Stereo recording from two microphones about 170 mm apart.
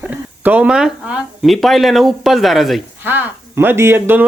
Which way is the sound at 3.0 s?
10° right (ahead or behind).